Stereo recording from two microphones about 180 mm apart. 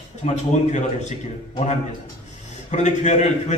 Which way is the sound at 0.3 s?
40° left (ahead or behind).